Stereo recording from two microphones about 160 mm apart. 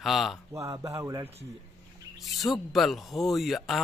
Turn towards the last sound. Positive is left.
turn(degrees=0)  # may be behind; listen again after turning